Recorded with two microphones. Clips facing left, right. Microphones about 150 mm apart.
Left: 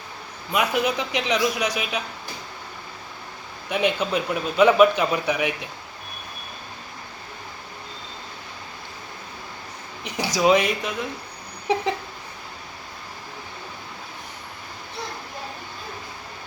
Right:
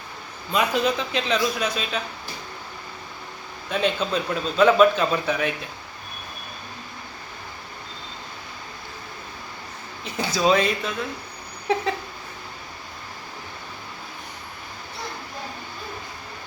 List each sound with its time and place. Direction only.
0.5 s a man's voice: 10° left (ahead or behind)
3.7 s a man's voice: 15° left (ahead or behind)
10.0 s a man's voice: 15° left (ahead or behind)